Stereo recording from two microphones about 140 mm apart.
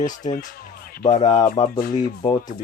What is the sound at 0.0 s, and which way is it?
Speech, 65° left (ahead or behind).